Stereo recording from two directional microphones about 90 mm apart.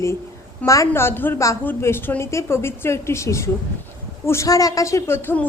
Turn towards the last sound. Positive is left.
turn(degrees=25)  # may be behind; listen again after turning